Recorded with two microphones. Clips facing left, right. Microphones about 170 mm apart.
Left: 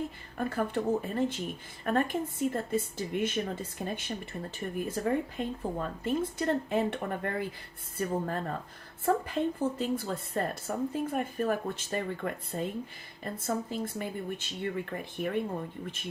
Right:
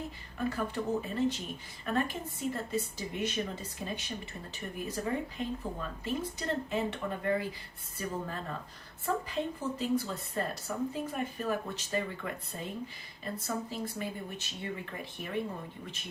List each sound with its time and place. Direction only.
0.3 s speech: 55° left (ahead or behind)